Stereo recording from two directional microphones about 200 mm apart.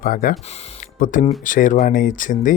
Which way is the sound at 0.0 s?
45° left (ahead or behind).